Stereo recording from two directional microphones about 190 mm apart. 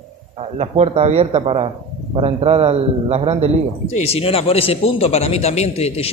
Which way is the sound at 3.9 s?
35° left (ahead or behind).